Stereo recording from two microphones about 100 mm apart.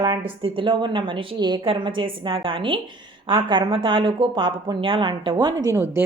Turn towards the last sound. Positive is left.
turn(degrees=-30)  # may be behind; listen again after turning